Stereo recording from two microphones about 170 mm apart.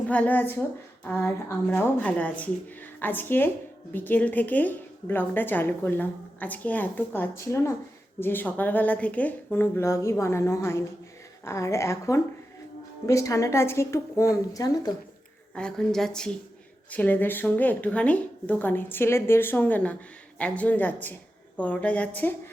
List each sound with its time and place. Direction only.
0.1 s a woman's voice: 10° left (ahead or behind)
15.5 s a woman's voice: 5° left (ahead or behind)